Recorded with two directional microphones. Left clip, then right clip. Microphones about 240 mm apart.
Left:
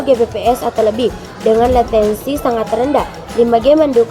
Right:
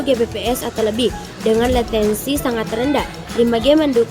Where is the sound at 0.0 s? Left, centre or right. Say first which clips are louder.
Left 5 dB; right.